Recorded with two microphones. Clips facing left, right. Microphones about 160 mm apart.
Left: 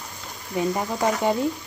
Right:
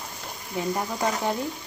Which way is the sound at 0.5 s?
15° left (ahead or behind).